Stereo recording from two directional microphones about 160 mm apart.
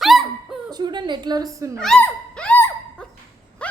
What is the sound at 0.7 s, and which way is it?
A woman's voice, 25° right (ahead or behind).